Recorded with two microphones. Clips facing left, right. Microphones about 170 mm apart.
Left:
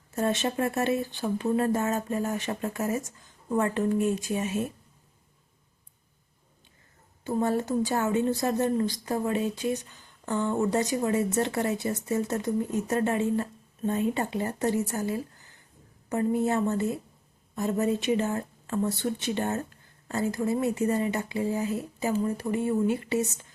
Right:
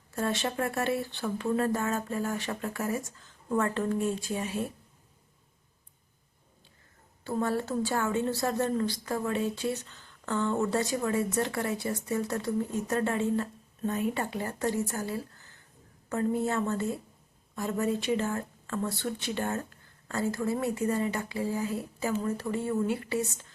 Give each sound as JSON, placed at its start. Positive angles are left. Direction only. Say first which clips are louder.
{"t": 0.2, "sound": "speech", "louder": "left 3 dB", "side_deg": 20}
{"t": 7.3, "sound": "a woman's voice", "louder": "left 3 dB", "side_deg": 20}